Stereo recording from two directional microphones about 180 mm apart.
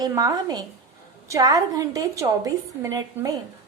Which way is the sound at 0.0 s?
20° right (ahead or behind).